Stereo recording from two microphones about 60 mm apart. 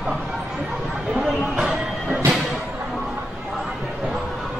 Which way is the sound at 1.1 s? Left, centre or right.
Centre.